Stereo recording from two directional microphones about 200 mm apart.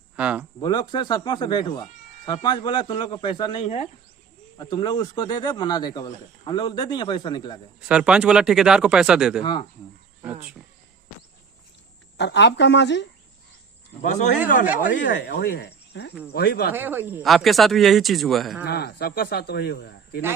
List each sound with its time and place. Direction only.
0.2 s speech: 5° right (ahead or behind)
0.6 s speech: 20° left (ahead or behind)
7.9 s speech: 5° right (ahead or behind)
9.4 s speech: 25° left (ahead or behind)
12.1 s speech: 60° left (ahead or behind)
14.0 s speech: 40° left (ahead or behind)
16.7 s speech: 10° right (ahead or behind)
17.2 s speech: centre (ahead or behind)
18.6 s speech: 55° left (ahead or behind)